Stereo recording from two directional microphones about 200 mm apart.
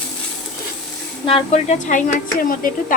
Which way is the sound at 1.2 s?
30° left (ahead or behind).